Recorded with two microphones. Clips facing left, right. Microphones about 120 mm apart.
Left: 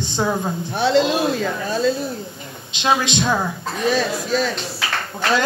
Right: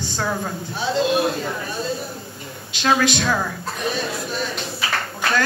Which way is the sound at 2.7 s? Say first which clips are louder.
Even; 20° left (ahead or behind).